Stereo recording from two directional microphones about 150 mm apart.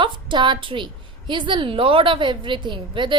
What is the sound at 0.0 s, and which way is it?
A woman's voice, 30° right (ahead or behind).